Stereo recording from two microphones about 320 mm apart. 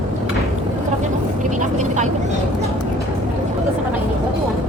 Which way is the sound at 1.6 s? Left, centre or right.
Right.